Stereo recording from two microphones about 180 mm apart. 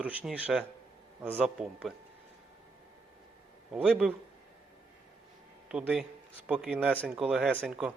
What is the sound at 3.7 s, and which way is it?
Speech, 5° right (ahead or behind).